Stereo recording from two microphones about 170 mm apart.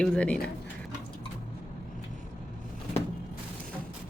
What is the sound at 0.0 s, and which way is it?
Speech, 5° left (ahead or behind).